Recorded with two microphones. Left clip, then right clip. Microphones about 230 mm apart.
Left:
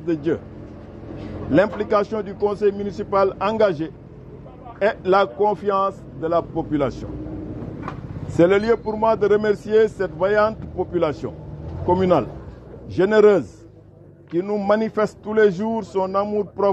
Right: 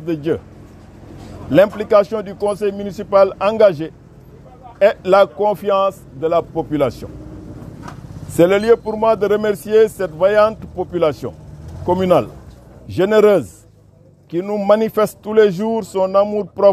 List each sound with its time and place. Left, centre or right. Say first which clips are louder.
0.0 s speech: right 3 dB; right
1.5 s speech: right 6 dB; right
8.4 s speech: right 4 dB; right